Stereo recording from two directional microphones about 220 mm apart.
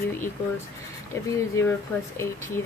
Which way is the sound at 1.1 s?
10° left (ahead or behind).